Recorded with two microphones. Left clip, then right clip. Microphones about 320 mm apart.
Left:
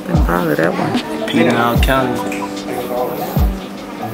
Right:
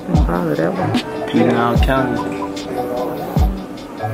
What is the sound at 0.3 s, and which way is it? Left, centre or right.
Speech, centre.